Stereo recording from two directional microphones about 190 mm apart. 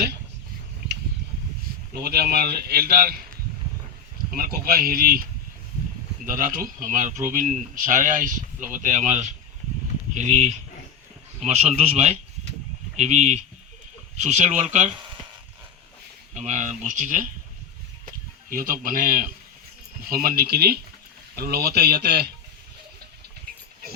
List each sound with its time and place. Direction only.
2.0 s speech: 55° right (ahead or behind)
4.3 s speech: 50° right (ahead or behind)
6.2 s speech: 45° right (ahead or behind)
11.3 s speech: 35° right (ahead or behind)
16.3 s speech: 40° right (ahead or behind)
18.0 s chicken: 45° right (ahead or behind)
20.1 s speech: 50° right (ahead or behind)